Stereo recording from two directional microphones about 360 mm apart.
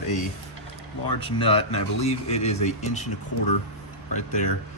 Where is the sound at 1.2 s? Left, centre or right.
Centre.